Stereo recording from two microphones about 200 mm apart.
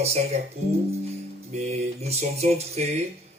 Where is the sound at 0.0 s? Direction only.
30° right (ahead or behind).